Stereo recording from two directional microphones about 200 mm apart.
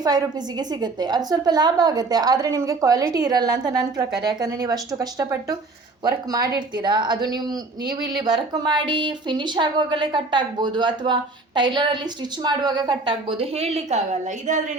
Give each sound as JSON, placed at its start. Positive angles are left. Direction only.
{"t": 0.0, "sound": "a woman's voice", "side_deg": -20}